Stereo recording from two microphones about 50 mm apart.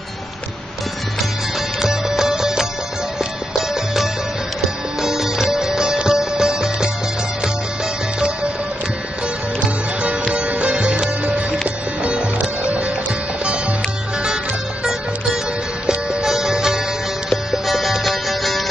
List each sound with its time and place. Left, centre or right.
1.8 s music: centre
5.0 s music: centre
10.3 s music: right
12.6 s music: right
15.9 s music: centre